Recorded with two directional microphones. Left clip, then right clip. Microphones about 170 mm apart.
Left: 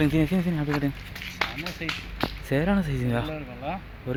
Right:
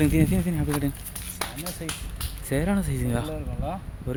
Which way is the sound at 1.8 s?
30° right (ahead or behind).